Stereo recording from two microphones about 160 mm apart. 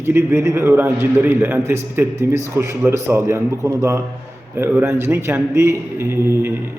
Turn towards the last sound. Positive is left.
turn(degrees=-15)  # may be behind; listen again after turning